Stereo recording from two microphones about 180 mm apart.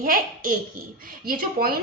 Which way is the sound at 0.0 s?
50° right (ahead or behind).